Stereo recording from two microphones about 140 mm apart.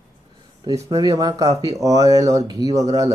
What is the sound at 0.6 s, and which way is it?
Speech, 25° right (ahead or behind).